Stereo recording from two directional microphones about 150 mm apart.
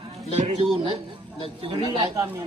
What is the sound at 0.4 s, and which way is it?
Speech, 40° right (ahead or behind).